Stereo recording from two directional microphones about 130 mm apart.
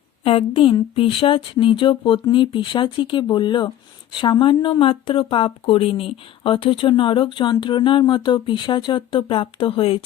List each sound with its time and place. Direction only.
0.3 s speech: 45° left (ahead or behind)